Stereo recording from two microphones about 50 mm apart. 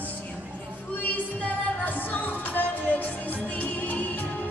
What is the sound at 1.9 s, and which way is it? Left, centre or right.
Music, left.